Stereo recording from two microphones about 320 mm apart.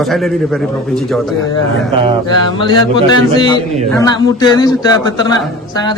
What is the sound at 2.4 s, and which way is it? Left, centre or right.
A man's voice, centre.